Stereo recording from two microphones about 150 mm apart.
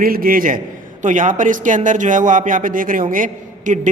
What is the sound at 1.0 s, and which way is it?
A man's voice, 55° right (ahead or behind).